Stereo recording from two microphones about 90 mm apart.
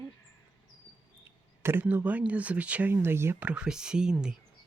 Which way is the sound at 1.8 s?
15° right (ahead or behind).